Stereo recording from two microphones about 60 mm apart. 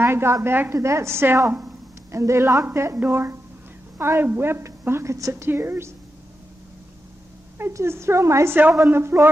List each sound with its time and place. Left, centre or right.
0.0 s a woman's voice: right
0.7 s a woman's voice: right
2.0 s a woman's voice: right
2.6 s a woman's voice: right
5.3 s a woman's voice: right
7.7 s a woman's voice: right